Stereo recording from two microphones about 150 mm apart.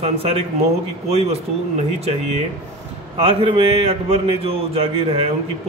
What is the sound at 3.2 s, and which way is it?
A man's voice, 40° right (ahead or behind).